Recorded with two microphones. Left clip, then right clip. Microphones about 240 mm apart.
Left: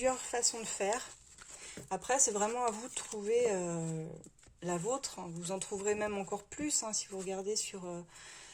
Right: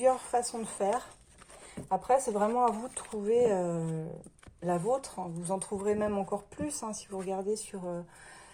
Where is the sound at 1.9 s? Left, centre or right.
Left.